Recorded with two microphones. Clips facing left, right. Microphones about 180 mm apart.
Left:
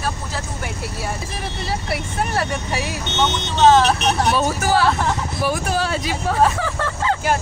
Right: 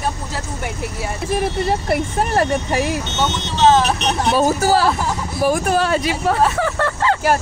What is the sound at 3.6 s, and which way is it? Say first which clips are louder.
Speech: left 1 dB; 15° right (ahead or behind).